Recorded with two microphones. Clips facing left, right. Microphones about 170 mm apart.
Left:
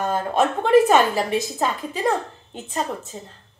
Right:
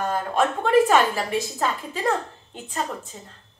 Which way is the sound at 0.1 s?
20° left (ahead or behind).